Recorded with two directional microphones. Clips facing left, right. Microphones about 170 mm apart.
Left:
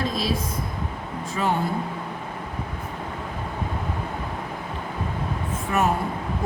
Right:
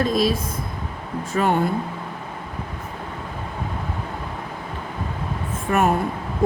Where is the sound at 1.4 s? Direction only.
60° right (ahead or behind).